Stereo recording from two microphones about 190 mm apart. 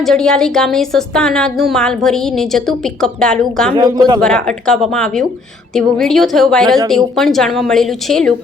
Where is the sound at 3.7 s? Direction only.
20° right (ahead or behind).